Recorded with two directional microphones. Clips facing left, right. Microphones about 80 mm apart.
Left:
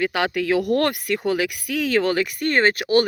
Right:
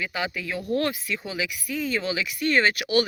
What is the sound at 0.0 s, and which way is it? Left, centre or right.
Speech, left.